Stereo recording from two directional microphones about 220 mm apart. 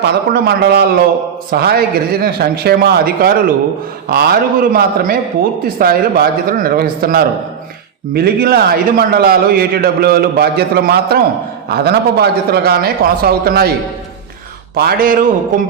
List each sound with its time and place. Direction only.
0.0 s a man's voice: 50° right (ahead or behind)
14.8 s speech: 40° right (ahead or behind)